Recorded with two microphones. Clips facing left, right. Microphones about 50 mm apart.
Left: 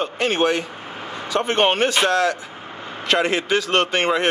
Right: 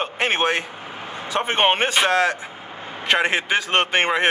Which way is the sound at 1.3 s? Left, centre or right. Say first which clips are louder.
Left 1 dB; right.